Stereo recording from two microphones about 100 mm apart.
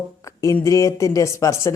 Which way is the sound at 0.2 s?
35° left (ahead or behind).